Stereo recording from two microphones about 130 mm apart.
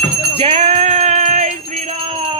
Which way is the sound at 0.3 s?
50° right (ahead or behind).